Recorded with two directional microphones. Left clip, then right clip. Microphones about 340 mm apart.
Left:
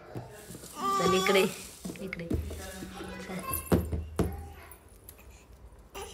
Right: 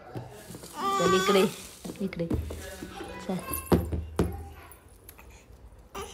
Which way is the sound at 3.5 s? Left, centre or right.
Centre.